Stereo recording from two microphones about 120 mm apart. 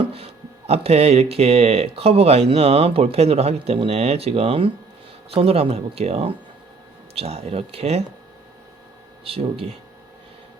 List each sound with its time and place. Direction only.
0.7 s speech: 60° right (ahead or behind)
9.2 s speech: 50° right (ahead or behind)